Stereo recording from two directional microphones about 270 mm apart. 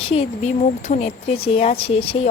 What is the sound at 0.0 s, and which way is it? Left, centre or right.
Speech, left.